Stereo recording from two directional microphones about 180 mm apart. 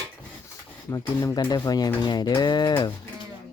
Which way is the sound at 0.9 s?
15° left (ahead or behind).